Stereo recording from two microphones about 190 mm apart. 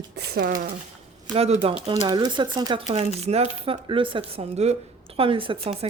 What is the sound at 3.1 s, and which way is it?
A woman's voice, 35° right (ahead or behind).